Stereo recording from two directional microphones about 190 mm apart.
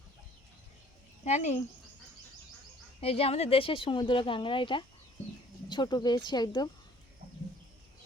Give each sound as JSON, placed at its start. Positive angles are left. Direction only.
{"t": 1.2, "sound": "speech", "side_deg": 40}
{"t": 3.0, "sound": "speech", "side_deg": 30}